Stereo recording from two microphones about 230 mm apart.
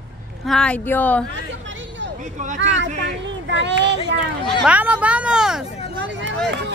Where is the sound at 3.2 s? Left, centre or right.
Right.